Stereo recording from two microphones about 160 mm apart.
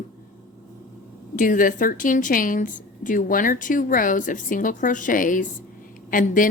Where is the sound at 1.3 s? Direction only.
55° left (ahead or behind).